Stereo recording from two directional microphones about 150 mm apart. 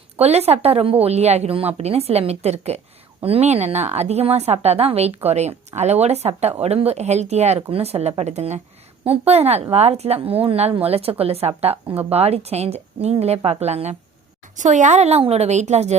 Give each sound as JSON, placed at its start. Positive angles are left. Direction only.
{"t": 0.2, "sound": "a woman's voice", "side_deg": -45}